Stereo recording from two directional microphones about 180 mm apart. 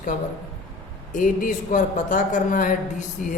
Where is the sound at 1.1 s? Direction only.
45° left (ahead or behind).